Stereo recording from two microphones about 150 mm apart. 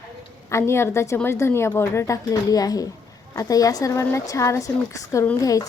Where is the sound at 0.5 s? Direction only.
15° left (ahead or behind).